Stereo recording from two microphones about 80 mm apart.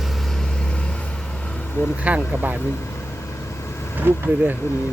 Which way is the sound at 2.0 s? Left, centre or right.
Centre.